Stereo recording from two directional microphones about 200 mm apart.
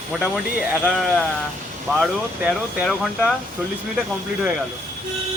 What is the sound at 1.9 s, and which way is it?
Speech, centre (ahead or behind).